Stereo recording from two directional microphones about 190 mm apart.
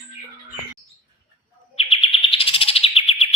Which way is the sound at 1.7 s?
30° left (ahead or behind).